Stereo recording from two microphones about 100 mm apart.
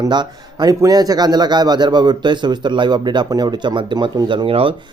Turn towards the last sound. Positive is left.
turn(degrees=-65)  # may be behind; listen again after turning